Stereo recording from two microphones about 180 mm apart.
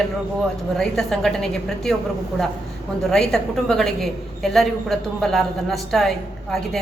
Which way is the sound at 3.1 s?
Centre (ahead or behind).